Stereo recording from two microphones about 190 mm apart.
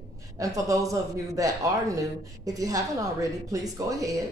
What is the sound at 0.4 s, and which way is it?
A man's voice, 15° right (ahead or behind).